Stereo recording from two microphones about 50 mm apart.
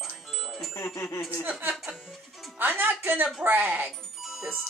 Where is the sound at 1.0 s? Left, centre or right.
Left.